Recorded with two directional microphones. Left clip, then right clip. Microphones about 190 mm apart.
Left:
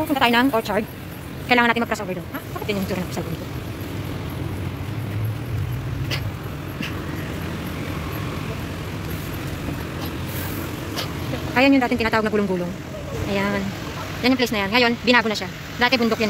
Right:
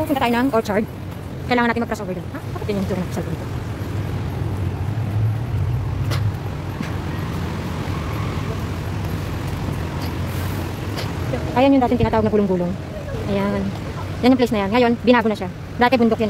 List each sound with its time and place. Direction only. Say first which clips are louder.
0.1 s speech: left 3 dB; centre (ahead or behind)
0.6 s speech: right 2 dB; 15° right (ahead or behind)
1.5 s a woman's voice: left 1 dB; centre (ahead or behind)
11.5 s speech: right 1 dB; 5° right (ahead or behind)